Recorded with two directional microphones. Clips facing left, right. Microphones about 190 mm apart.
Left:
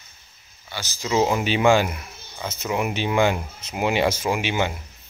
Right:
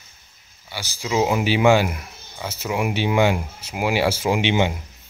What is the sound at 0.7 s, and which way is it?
Speech, 10° right (ahead or behind).